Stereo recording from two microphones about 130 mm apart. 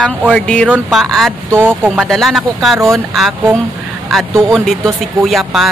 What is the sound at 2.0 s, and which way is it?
Speech, centre (ahead or behind).